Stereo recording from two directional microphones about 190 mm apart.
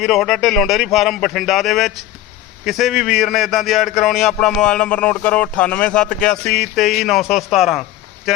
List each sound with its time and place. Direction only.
0.0 s a man's voice: centre (ahead or behind)